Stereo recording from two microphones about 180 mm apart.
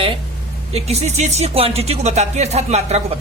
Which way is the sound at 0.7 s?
35° right (ahead or behind).